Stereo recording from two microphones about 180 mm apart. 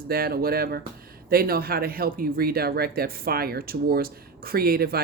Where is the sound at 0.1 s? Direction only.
55° right (ahead or behind).